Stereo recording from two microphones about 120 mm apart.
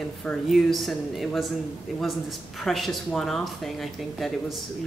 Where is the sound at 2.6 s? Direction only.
Centre (ahead or behind).